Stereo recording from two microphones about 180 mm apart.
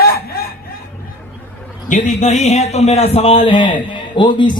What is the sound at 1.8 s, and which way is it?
A man's voice, 40° left (ahead or behind).